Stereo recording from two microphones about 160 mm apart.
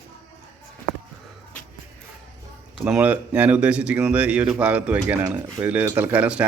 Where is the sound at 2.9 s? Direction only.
10° right (ahead or behind).